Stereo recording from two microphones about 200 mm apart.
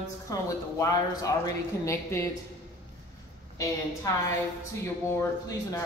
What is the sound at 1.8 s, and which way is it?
Speech, 15° left (ahead or behind).